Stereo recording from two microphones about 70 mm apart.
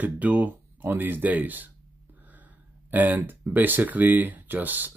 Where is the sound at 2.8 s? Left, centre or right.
Right.